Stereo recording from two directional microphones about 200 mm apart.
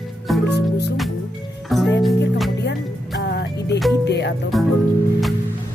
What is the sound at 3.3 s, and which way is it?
Music, 55° left (ahead or behind).